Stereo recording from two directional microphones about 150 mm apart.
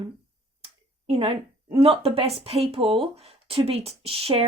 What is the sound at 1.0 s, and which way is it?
Speech, 40° right (ahead or behind).